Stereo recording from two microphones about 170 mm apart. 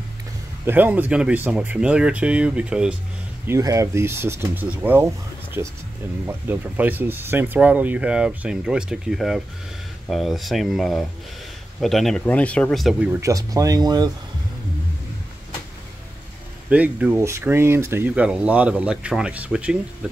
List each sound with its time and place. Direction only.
0.7 s speech: 10° right (ahead or behind)
3.4 s speech: 20° right (ahead or behind); by 13.1 s centre (ahead or behind)
13.1 s speech: 20° right (ahead or behind)
16.6 s speech: 10° right (ahead or behind)